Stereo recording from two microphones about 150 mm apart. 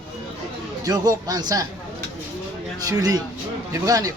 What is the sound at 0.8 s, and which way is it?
Speech, 25° right (ahead or behind).